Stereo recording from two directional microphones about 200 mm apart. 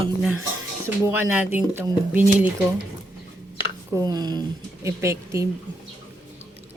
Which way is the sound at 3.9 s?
20° right (ahead or behind).